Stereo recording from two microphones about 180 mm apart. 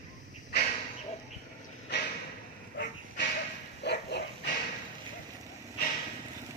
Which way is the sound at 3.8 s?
70° left (ahead or behind).